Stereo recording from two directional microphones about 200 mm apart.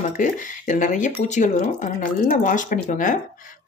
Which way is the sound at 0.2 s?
40° left (ahead or behind).